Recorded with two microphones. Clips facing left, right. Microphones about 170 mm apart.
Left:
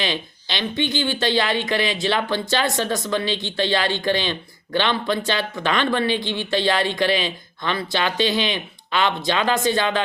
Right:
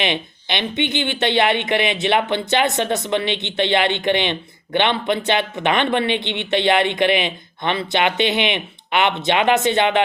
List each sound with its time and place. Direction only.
0.0 s speech: 20° right (ahead or behind)